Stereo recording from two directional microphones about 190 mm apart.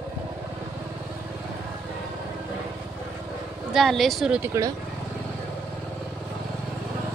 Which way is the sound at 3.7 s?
Centre (ahead or behind).